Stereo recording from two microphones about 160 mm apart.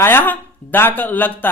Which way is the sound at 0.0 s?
15° left (ahead or behind).